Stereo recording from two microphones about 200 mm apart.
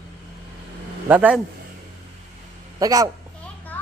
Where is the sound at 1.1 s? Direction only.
10° right (ahead or behind).